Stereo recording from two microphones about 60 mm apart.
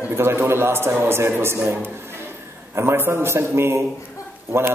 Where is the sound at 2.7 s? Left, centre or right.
Right.